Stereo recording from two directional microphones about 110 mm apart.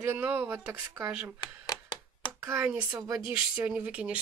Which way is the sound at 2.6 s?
15° right (ahead or behind).